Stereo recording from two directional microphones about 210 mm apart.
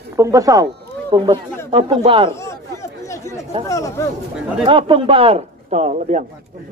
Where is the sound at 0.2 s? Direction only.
15° right (ahead or behind).